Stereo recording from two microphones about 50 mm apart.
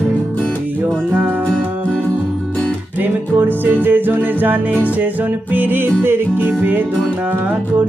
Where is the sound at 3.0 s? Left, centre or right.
Right.